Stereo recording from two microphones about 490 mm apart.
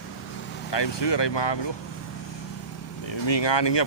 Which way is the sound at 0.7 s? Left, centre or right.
Left.